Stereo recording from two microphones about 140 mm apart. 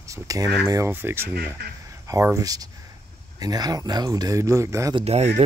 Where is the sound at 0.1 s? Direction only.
25° right (ahead or behind).